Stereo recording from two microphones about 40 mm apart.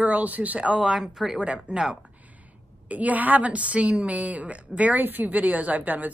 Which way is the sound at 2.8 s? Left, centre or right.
Right.